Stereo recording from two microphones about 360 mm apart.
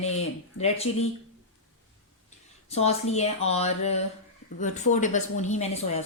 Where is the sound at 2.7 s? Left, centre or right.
Centre.